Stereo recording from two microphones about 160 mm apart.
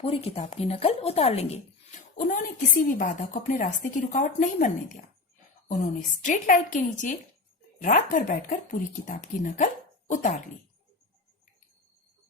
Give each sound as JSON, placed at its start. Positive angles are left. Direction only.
{"t": 0.0, "sound": "speech", "side_deg": 40}
{"t": 2.3, "sound": "a woman's voice", "side_deg": 60}